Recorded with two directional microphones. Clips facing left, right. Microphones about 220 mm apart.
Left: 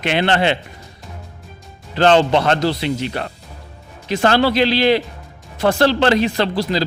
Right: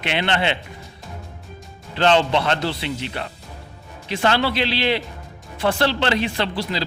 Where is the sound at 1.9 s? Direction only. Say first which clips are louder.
Left 4 dB; 40° left (ahead or behind).